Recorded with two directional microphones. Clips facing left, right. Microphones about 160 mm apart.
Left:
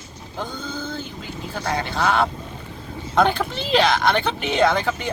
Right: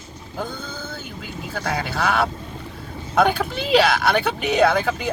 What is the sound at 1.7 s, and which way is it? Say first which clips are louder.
Speech: left 1 dB; 5° right (ahead or behind).